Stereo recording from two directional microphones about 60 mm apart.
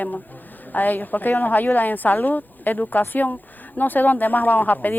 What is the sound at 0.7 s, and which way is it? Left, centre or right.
Speech, left.